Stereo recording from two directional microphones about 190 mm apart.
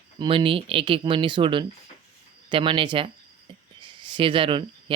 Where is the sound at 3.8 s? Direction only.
25° right (ahead or behind).